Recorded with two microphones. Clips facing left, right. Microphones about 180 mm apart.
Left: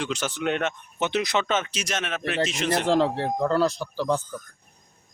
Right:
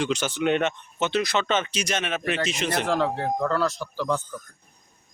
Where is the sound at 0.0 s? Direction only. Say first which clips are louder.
Right 3 dB; centre (ahead or behind).